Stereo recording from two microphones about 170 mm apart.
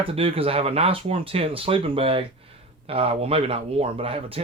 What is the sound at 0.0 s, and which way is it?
Speech, 35° right (ahead or behind).